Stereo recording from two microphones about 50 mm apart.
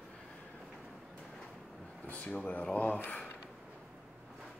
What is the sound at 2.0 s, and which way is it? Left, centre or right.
Speech, left.